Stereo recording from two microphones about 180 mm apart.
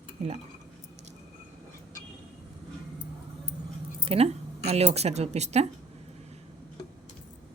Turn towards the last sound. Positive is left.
turn(degrees=-40)  # may be behind; listen again after turning